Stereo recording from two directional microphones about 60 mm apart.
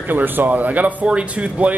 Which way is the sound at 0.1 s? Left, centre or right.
Right.